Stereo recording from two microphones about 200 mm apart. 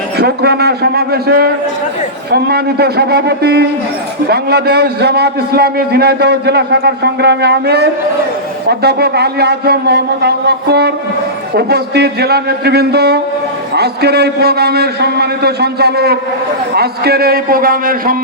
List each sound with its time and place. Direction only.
0.2 s a man's voice: 55° right (ahead or behind)